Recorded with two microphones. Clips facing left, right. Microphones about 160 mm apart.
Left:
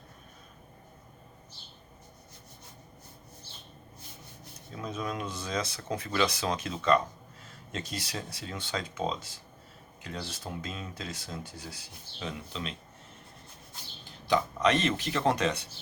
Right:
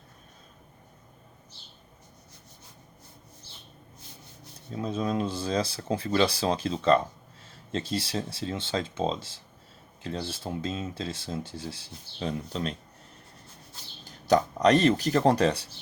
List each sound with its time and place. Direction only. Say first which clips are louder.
4.7 s speech: right 6 dB; 30° right (ahead or behind)
12.5 s speech: right 6 dB; 45° right (ahead or behind)
14.0 s speech: right 5 dB; 45° right (ahead or behind)